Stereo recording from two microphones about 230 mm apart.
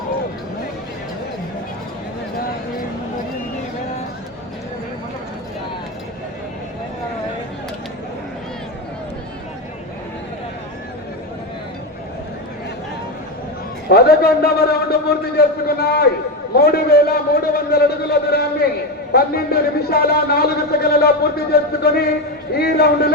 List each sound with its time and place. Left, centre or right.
13.8 s a man's voice: left